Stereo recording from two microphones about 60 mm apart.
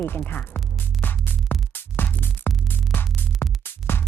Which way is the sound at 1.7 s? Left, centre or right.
Left.